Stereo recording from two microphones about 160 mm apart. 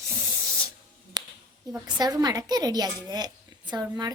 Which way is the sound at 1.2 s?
25° right (ahead or behind).